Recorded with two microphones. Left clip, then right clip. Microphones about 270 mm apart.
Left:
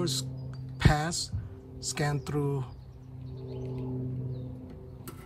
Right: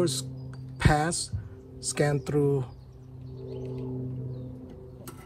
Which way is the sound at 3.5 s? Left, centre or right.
Left.